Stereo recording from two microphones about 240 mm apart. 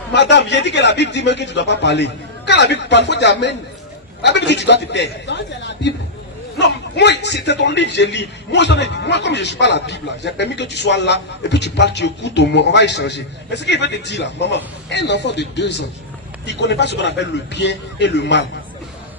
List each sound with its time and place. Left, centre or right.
0.1 s a man's voice: left